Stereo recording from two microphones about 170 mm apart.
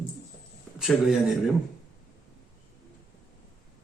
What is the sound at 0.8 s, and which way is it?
Speech, centre (ahead or behind).